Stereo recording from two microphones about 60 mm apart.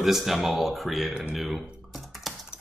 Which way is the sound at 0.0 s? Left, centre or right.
Centre.